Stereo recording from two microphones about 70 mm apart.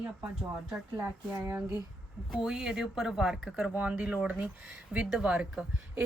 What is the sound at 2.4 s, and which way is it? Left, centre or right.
A woman's voice, centre.